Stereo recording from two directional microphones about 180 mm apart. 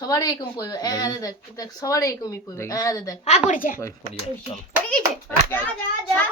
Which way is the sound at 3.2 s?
45° left (ahead or behind).